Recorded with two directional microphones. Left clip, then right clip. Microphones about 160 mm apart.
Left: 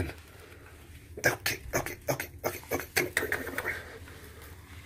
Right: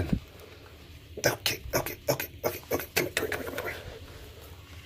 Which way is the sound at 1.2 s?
15° right (ahead or behind).